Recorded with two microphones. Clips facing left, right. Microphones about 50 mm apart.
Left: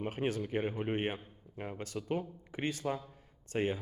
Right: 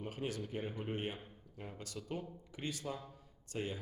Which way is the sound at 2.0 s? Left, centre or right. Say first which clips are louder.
Left 7 dB; left.